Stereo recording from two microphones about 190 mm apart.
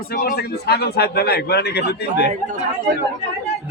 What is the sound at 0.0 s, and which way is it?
A man's voice, 50° left (ahead or behind).